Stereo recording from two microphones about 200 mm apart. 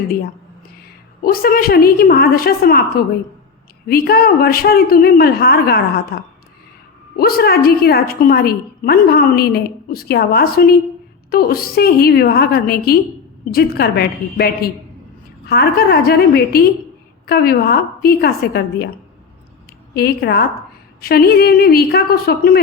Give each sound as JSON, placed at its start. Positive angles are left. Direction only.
{"t": 1.2, "sound": "a woman's voice", "side_deg": 50}
{"t": 19.9, "sound": "a woman's voice", "side_deg": 50}